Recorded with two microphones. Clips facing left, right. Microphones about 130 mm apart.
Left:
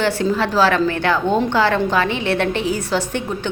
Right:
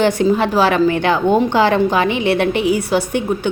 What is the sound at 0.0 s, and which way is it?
A woman's voice, 15° right (ahead or behind).